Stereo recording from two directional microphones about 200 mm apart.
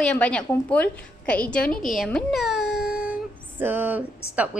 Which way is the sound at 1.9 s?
Centre (ahead or behind).